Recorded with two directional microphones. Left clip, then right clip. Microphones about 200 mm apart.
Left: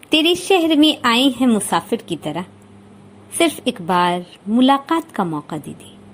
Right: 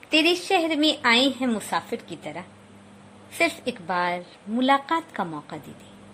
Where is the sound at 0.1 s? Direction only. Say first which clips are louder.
Left 6 dB; 15° left (ahead or behind).